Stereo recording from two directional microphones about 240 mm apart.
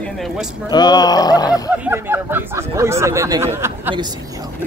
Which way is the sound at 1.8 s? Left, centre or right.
Centre.